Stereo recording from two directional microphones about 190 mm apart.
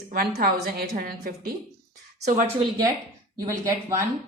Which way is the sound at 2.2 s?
40° right (ahead or behind).